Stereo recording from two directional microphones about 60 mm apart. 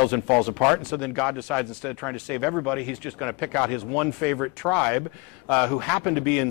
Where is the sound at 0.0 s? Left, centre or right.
Centre.